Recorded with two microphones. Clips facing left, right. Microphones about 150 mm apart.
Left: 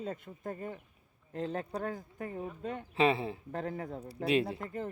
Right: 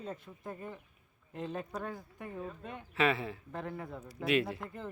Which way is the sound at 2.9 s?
30° left (ahead or behind).